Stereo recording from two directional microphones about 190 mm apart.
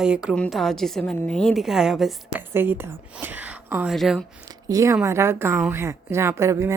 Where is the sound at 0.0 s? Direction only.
5° right (ahead or behind).